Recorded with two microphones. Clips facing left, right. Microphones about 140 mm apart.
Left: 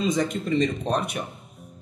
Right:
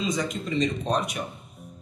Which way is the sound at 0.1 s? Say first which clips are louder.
Left 4 dB; 55° left (ahead or behind).